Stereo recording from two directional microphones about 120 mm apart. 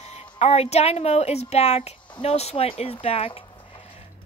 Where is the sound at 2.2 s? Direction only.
60° left (ahead or behind).